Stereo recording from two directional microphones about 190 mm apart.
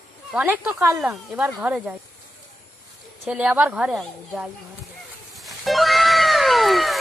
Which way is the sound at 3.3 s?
5° right (ahead or behind).